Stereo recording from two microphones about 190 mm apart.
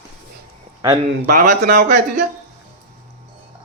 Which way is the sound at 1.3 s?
45° right (ahead or behind).